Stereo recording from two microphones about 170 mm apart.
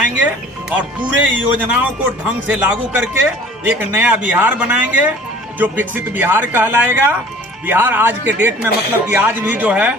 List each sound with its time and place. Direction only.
1.2 s a man's voice: 10° right (ahead or behind)